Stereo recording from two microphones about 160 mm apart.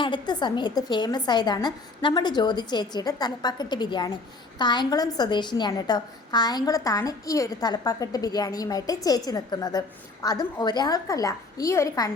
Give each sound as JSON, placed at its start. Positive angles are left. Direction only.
{"t": 0.0, "sound": "a woman's voice", "side_deg": 30}